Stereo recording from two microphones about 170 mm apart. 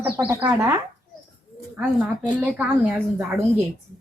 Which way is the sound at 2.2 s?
10° right (ahead or behind).